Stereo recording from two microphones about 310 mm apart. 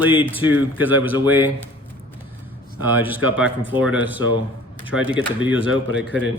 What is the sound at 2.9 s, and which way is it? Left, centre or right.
Speech, centre.